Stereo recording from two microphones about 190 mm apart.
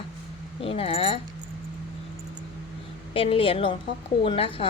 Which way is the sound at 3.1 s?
30° left (ahead or behind).